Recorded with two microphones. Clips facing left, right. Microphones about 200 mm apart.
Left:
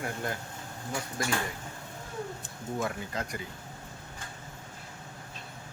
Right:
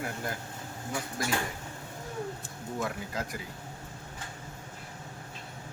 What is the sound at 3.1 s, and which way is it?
Speech, 5° right (ahead or behind).